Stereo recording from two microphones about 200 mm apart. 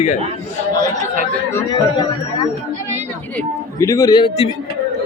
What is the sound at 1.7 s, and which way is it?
A man's voice, 20° left (ahead or behind).